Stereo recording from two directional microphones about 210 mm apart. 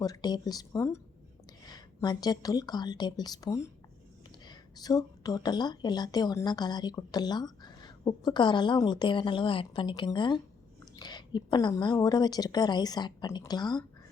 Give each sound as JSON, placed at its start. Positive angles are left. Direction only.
{"t": 0.0, "sound": "a woman's voice", "side_deg": 20}